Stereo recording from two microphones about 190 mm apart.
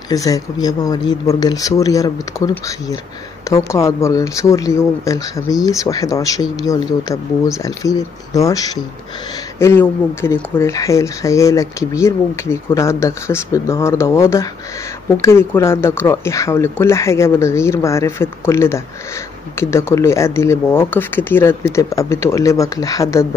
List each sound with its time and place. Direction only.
0.1 s speech: 20° left (ahead or behind)